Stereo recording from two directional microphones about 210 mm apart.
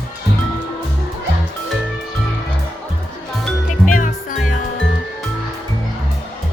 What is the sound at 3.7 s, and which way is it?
Music, 40° left (ahead or behind).